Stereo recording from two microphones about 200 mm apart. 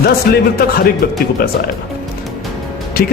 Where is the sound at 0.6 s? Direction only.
50° left (ahead or behind).